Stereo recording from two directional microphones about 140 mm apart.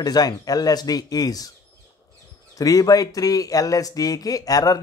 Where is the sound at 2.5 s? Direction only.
25° left (ahead or behind).